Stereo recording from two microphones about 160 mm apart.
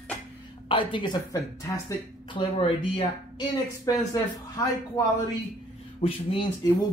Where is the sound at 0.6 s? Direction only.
30° left (ahead or behind).